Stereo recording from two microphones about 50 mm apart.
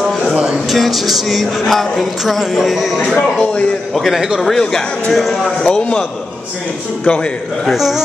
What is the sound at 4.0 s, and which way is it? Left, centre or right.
Music, centre.